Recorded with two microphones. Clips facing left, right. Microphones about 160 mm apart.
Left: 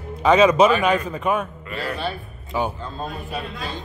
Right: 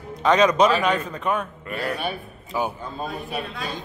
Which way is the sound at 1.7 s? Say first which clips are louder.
Even; 15° right (ahead or behind).